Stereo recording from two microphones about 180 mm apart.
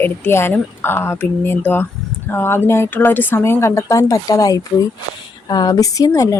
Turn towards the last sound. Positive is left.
turn(degrees=20)  # may be behind; listen again after turning